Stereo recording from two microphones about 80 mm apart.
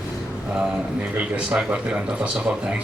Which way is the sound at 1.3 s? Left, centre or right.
Centre.